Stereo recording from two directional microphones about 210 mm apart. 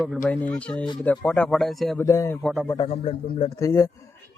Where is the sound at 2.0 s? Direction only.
15° left (ahead or behind).